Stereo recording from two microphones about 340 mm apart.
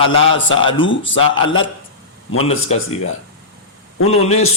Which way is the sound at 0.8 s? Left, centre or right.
Left.